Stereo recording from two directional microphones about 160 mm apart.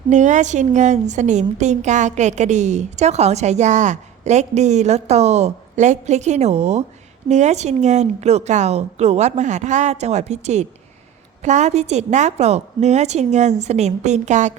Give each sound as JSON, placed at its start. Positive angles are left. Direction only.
{"t": 0.1, "sound": "a woman's voice", "side_deg": -50}